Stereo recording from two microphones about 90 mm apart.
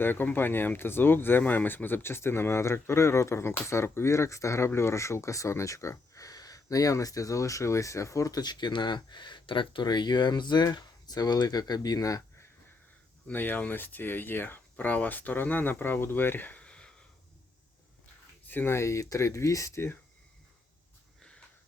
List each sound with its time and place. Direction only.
0.0 s speech: 20° left (ahead or behind); by 12.5 s 40° left (ahead or behind)
13.2 s speech: 20° left (ahead or behind)
18.4 s speech: 25° left (ahead or behind)